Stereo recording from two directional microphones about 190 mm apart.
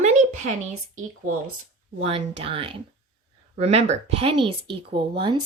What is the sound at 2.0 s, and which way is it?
Speech, 30° right (ahead or behind).